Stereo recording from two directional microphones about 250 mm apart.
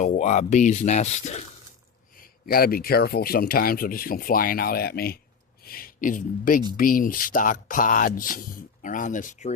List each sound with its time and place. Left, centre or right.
0.0 s speech: left